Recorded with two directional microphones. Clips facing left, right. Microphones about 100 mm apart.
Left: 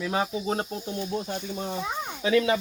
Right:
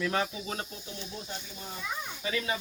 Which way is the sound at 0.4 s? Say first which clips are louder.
Left 9 dB; 40° left (ahead or behind).